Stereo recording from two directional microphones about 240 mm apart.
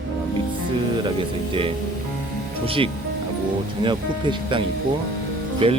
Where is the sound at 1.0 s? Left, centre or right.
Right.